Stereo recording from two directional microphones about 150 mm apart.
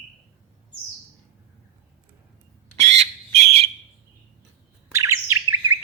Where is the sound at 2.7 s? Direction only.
50° right (ahead or behind).